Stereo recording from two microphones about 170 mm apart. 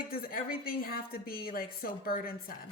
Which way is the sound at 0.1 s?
60° left (ahead or behind).